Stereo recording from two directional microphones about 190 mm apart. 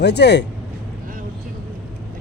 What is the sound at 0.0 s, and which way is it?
Speech, 60° left (ahead or behind).